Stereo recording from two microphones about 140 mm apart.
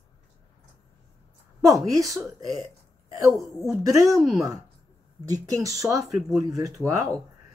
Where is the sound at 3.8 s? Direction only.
25° right (ahead or behind).